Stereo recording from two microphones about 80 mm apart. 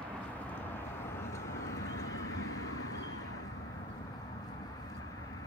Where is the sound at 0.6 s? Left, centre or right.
Left.